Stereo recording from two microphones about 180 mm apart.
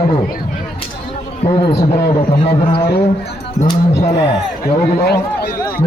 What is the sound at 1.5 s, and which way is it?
A man's voice, 25° left (ahead or behind).